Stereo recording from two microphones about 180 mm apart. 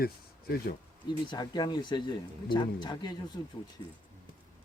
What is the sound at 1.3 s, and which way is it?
Speech, 25° left (ahead or behind).